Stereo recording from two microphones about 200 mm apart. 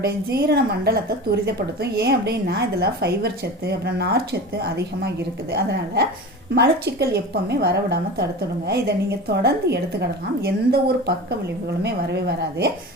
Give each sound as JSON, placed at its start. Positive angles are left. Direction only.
{"t": 0.0, "sound": "a woman's voice", "side_deg": -55}